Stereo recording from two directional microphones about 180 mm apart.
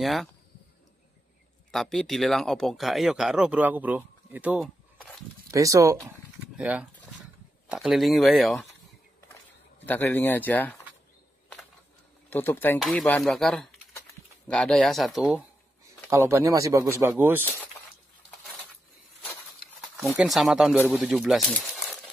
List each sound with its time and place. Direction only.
0.0 s speech: centre (ahead or behind)
1.7 s speech: centre (ahead or behind)
5.5 s speech: 20° right (ahead or behind)
6.5 s a sound: 5° right (ahead or behind)
7.6 s speech: 5° right (ahead or behind)
9.8 s speech: 10° left (ahead or behind)
12.3 s speech: 10° left (ahead or behind); by 17.5 s 10° right (ahead or behind)
20.2 s speech: centre (ahead or behind)